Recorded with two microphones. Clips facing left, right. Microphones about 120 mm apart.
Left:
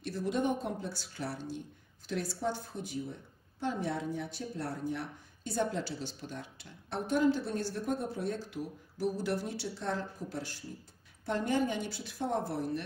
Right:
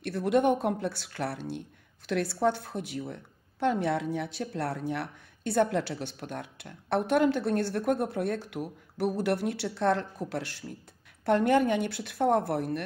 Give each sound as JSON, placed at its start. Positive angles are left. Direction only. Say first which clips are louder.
{"t": 0.0, "sound": "a woman's voice", "louder": "right 7 dB", "side_deg": -65}